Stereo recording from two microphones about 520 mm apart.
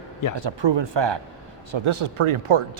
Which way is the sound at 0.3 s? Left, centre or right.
Right.